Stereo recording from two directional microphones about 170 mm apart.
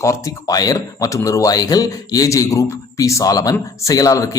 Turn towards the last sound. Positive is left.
turn(degrees=20)  # may be behind; listen again after turning